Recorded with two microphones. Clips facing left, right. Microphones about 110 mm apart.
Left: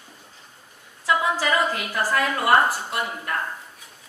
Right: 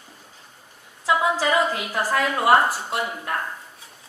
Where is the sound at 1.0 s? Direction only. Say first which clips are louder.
Right 1 dB; 20° right (ahead or behind).